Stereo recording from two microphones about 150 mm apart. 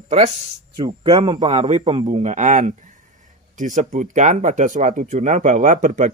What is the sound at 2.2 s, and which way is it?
Speech, 55° right (ahead or behind).